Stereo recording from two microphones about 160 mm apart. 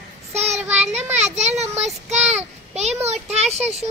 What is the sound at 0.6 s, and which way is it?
Child singing, 10° right (ahead or behind).